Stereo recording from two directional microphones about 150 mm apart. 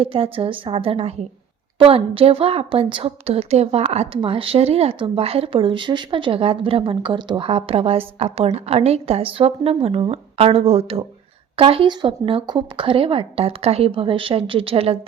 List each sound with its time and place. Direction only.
0.0 s a woman's voice: 40° right (ahead or behind)